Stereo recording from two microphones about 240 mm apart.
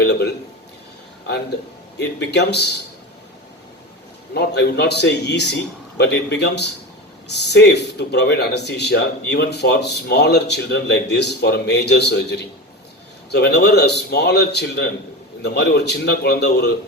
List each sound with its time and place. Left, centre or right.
0.0 s a sound: left
2.0 s a man's voice: left
4.4 s a man's voice: left